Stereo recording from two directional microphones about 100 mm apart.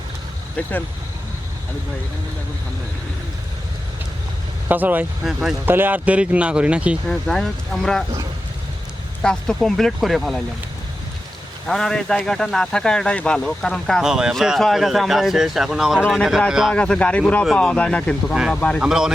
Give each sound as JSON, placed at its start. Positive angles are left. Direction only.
{"t": 4.7, "sound": "speech", "side_deg": -15}
{"t": 5.2, "sound": "speech", "side_deg": -5}
{"t": 5.6, "sound": "speech", "side_deg": -20}
{"t": 7.1, "sound": "speech", "side_deg": 5}
{"t": 9.2, "sound": "speech", "side_deg": 5}
{"t": 11.7, "sound": "speech", "side_deg": 5}
{"t": 14.0, "sound": "speech", "side_deg": -5}
{"t": 16.7, "sound": "speech", "side_deg": 10}
{"t": 18.8, "sound": "speech", "side_deg": -5}